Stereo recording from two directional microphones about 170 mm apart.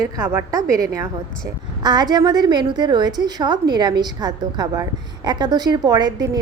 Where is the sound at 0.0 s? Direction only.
20° right (ahead or behind).